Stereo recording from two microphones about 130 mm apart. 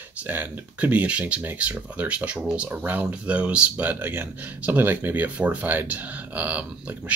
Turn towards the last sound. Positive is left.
turn(degrees=-10)  # may be behind; listen again after turning